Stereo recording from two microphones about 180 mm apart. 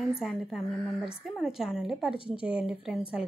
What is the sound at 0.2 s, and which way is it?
A woman's voice, centre (ahead or behind).